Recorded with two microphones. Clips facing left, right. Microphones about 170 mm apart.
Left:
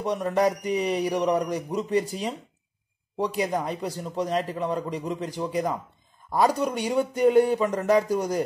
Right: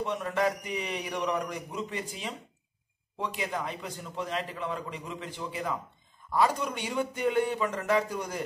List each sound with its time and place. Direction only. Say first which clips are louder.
0.0 s a man's voice: left 5 dB; 40° left (ahead or behind)